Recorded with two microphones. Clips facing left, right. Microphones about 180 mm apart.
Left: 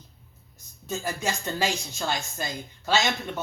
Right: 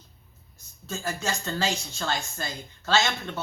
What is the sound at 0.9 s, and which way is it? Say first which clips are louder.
Speech: left 1 dB; 15° left (ahead or behind).